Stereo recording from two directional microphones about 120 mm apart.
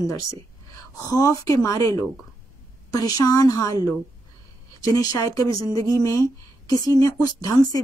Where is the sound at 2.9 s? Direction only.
30° left (ahead or behind).